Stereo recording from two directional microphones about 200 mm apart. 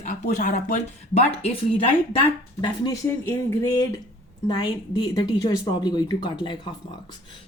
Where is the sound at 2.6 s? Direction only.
15° left (ahead or behind).